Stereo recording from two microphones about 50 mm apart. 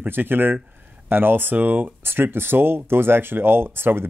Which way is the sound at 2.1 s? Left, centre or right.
Right.